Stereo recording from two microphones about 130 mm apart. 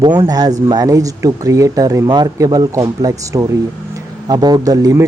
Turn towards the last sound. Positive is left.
turn(degrees=-25)  # may be behind; listen again after turning